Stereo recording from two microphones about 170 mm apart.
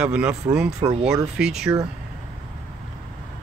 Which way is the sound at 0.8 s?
25° right (ahead or behind).